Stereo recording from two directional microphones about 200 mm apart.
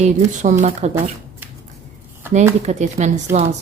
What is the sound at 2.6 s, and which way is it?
Speech, 35° right (ahead or behind).